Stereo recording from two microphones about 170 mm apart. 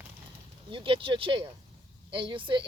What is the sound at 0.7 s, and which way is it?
Speech, 30° right (ahead or behind).